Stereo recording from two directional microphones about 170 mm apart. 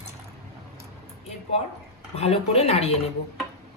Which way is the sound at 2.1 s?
40° left (ahead or behind).